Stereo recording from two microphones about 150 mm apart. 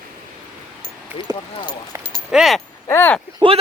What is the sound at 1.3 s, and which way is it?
Speech, 25° right (ahead or behind).